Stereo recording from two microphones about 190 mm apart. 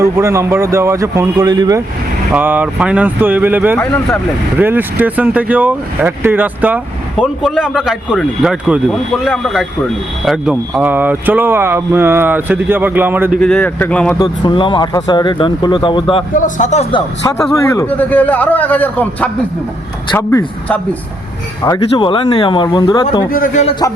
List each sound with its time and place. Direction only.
0.0 s speech: 15° right (ahead or behind)
2.3 s speech: 10° right (ahead or behind)
13.4 s a man's voice: 5° left (ahead or behind)
14.2 s speech: 25° left (ahead or behind)
16.3 s speech: 40° left (ahead or behind)
16.9 s a man's voice: 15° left (ahead or behind)
21.6 s speech: 20° left (ahead or behind)
23.3 s speech: 45° left (ahead or behind)